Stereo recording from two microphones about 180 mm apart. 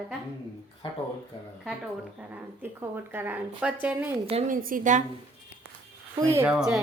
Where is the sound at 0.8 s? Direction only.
30° left (ahead or behind).